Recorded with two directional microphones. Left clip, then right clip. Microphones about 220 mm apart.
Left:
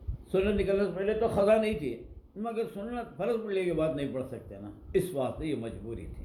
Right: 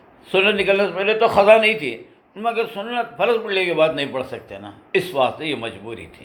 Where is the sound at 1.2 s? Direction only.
40° right (ahead or behind).